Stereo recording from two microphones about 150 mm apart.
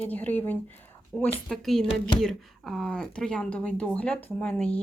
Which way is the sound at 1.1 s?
5° right (ahead or behind).